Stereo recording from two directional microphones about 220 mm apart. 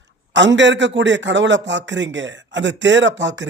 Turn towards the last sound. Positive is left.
turn(degrees=-55)  # may be behind; listen again after turning